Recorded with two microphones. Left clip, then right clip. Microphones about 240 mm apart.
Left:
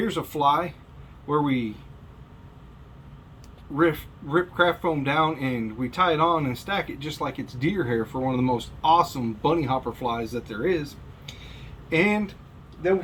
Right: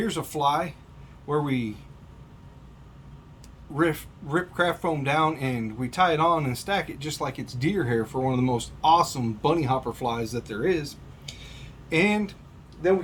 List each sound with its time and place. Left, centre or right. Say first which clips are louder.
0.0 s speech: left 2 dB; right
3.8 s speech: left 2 dB; right